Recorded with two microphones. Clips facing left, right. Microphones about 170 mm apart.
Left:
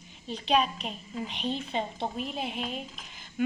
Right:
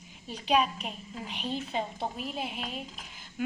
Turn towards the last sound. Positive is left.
turn(degrees=-5)  # may be behind; listen again after turning